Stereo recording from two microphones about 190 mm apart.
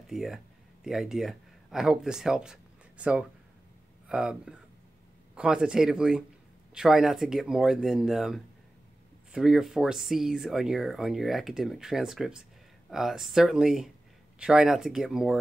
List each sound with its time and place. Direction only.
0.0 s speech: centre (ahead or behind)